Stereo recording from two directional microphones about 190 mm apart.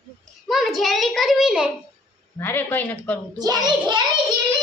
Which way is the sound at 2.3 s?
10° left (ahead or behind).